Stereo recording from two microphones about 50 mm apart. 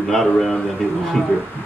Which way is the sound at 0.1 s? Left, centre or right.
Centre.